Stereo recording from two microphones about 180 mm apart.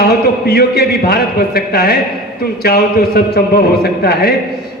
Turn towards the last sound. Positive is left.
turn(degrees=60)  # may be behind; listen again after turning